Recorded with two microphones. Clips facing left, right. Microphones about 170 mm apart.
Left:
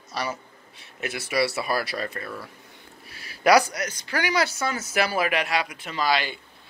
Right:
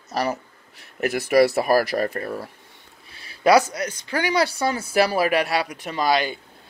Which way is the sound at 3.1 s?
25° right (ahead or behind).